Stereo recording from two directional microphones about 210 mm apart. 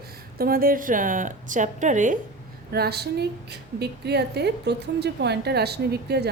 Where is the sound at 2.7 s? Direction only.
50° right (ahead or behind).